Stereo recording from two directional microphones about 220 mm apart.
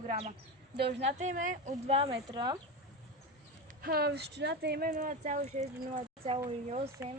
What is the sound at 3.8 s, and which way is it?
Speech, 45° right (ahead or behind).